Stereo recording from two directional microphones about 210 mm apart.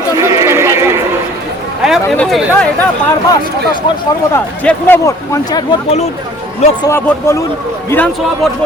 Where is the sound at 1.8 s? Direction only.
Centre (ahead or behind).